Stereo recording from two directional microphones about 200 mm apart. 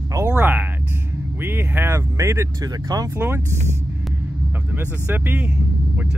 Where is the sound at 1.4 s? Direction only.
10° right (ahead or behind).